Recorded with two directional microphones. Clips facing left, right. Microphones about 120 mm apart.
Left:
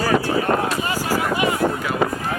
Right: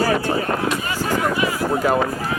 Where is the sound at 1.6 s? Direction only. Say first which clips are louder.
Right 1 dB; 50° left (ahead or behind).